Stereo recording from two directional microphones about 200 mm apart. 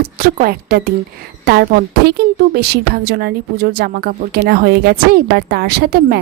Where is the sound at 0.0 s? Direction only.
50° right (ahead or behind).